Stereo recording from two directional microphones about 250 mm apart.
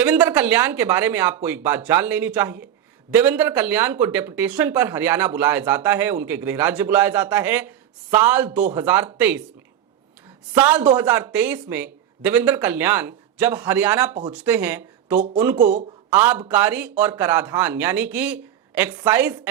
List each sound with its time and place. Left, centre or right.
0.0 s speech: centre
10.5 s speech: centre
15.5 s speech: right
16.1 s speech: centre